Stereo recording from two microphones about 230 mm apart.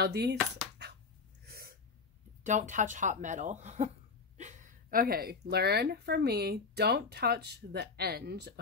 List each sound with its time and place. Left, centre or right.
0.0 s speech: right
0.8 s a sound: right
1.4 s sneeze: right
2.4 s speech: right